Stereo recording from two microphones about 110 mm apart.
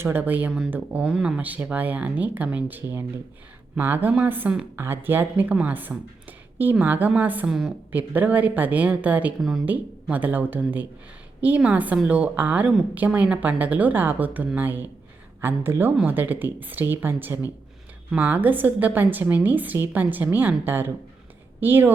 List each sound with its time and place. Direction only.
0.0 s speech: 20° right (ahead or behind)